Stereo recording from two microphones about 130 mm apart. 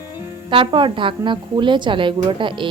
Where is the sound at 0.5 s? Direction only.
40° right (ahead or behind).